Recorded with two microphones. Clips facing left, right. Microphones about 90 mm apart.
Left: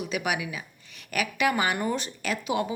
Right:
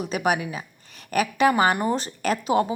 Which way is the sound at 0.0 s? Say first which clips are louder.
Right 5 dB; 40° right (ahead or behind).